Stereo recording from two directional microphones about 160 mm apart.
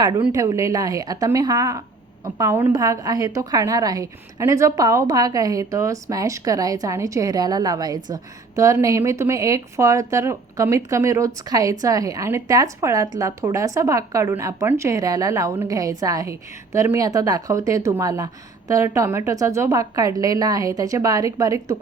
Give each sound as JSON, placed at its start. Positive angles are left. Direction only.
{"t": 0.0, "sound": "a woman's voice", "side_deg": -25}